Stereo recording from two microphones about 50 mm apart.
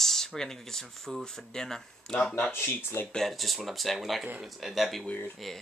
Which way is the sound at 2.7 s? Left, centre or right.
Left.